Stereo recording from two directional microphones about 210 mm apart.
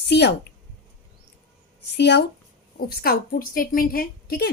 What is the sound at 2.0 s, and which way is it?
Speech, 55° left (ahead or behind).